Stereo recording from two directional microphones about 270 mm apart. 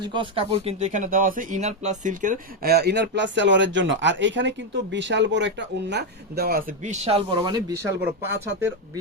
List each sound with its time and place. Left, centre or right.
0.0 s speech: centre